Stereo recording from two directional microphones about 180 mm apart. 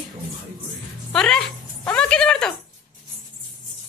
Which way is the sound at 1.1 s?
5° left (ahead or behind).